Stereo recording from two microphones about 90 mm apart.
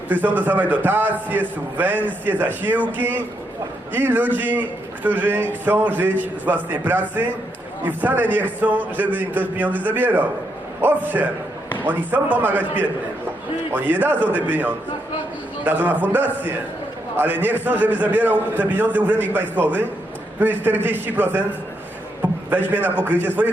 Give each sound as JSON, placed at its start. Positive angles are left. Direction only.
{"t": 0.1, "sound": "a man's voice", "side_deg": -20}
{"t": 13.7, "sound": "a man's voice", "side_deg": -20}